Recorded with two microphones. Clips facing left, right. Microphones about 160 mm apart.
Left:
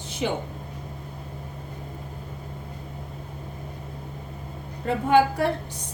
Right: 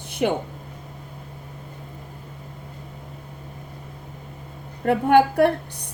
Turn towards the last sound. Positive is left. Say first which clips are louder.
# right 4 dB
turn(degrees=-60)  # may be behind; listen again after turning